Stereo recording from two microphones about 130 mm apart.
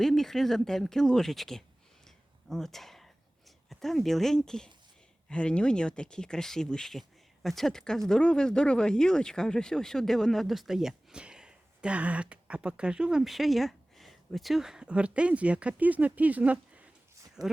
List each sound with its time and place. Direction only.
0.0 s speech: centre (ahead or behind)
2.0 s a sound: 5° left (ahead or behind)
3.7 s speech: centre (ahead or behind)
17.4 s speech: 30° right (ahead or behind)